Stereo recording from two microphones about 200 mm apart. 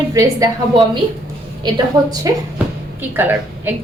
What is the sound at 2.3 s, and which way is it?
A woman's voice, 20° right (ahead or behind).